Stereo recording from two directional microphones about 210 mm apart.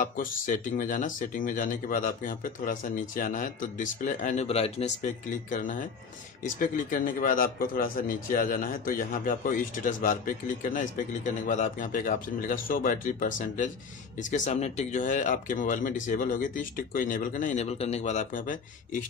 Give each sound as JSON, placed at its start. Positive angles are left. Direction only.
{"t": 0.0, "sound": "speech", "side_deg": 40}